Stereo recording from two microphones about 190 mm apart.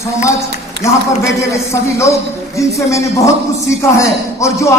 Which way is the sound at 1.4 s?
15° left (ahead or behind).